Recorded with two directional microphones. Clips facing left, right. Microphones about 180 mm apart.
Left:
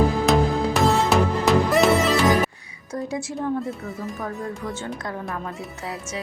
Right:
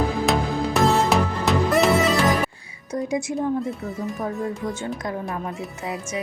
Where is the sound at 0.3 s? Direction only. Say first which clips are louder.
Left 3 dB; centre (ahead or behind).